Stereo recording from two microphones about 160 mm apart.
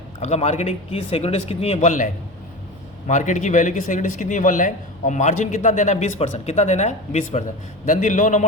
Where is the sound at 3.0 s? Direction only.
50° left (ahead or behind).